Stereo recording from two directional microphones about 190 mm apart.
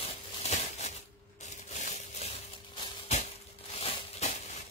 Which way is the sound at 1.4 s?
40° left (ahead or behind).